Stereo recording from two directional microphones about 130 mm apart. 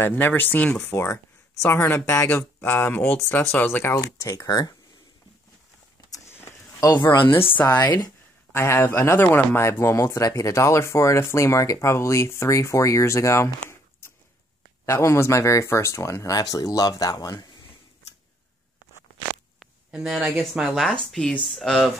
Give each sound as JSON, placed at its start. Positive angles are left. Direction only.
{"t": 0.0, "sound": "speech", "side_deg": 15}
{"t": 0.9, "sound": "speech", "side_deg": 20}
{"t": 5.9, "sound": "a sound", "side_deg": 25}
{"t": 7.5, "sound": "speech", "side_deg": 15}
{"t": 7.8, "sound": "speech", "side_deg": 30}
{"t": 8.5, "sound": "speech", "side_deg": 20}
{"t": 14.9, "sound": "speech", "side_deg": 20}
{"t": 19.6, "sound": "a sound", "side_deg": -5}
{"t": 20.5, "sound": "speech", "side_deg": -5}